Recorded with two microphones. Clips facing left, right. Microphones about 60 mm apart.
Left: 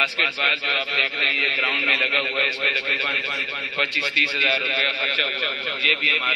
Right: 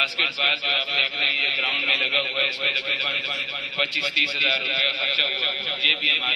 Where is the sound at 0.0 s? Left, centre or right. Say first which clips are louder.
Left 3 dB; left.